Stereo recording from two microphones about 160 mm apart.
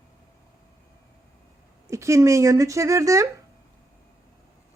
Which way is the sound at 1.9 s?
20° right (ahead or behind).